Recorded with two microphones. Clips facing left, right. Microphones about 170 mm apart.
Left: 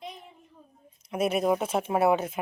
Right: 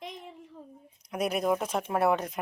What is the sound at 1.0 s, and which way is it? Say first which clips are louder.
Speech: left 3 dB; centre (ahead or behind).